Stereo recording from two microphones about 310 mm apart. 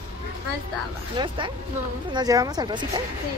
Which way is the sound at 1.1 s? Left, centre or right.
Centre.